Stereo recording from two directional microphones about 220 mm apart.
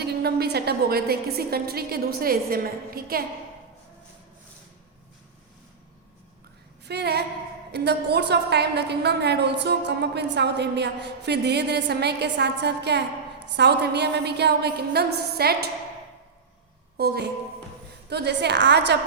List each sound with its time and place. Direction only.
0.0 s a woman's voice: 45° right (ahead or behind)
6.8 s a woman's voice: 50° right (ahead or behind)
17.0 s a woman's voice: 45° right (ahead or behind)